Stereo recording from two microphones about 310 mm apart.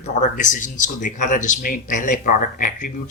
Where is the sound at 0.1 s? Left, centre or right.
Left.